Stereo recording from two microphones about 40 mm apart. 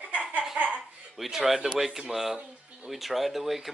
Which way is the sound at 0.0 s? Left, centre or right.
Right.